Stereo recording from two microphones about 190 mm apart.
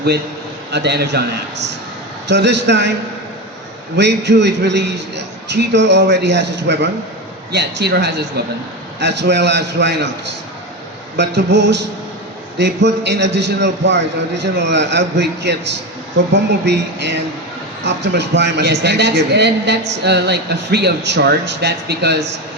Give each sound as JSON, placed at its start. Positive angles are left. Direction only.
{"t": 0.7, "sound": "a man's voice", "side_deg": -60}
{"t": 2.2, "sound": "a man's voice", "side_deg": -65}
{"t": 3.9, "sound": "a man's voice", "side_deg": -65}
{"t": 11.2, "sound": "a man's voice", "side_deg": -65}